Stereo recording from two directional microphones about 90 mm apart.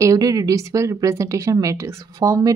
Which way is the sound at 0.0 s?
40° right (ahead or behind).